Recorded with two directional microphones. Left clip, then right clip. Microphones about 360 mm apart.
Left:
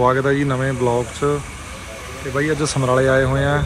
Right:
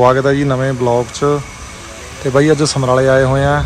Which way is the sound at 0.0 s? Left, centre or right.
Centre.